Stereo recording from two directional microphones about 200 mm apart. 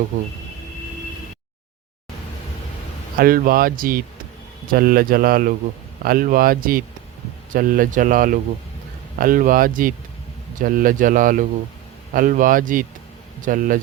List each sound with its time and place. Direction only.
3.2 s speech: 45° right (ahead or behind)